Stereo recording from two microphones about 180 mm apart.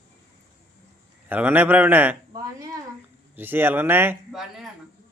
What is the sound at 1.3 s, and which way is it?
Speech, 10° right (ahead or behind).